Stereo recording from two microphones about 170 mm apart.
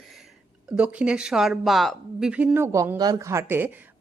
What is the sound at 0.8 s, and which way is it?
A woman's voice, 5° right (ahead or behind).